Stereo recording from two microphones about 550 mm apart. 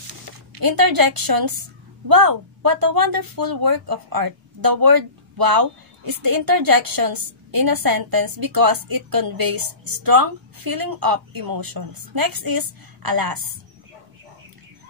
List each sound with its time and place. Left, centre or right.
0.6 s a woman's voice: right